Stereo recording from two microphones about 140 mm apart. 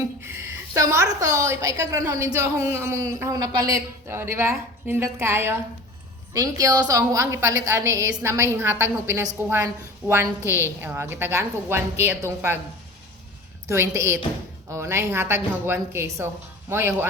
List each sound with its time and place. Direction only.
0.2 s a sound: 15° right (ahead or behind)
1.2 s a woman's voice: 20° right (ahead or behind)
13.7 s a woman's voice: 20° right (ahead or behind)